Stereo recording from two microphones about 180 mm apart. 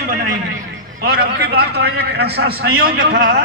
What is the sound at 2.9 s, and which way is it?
Speech, 90° right.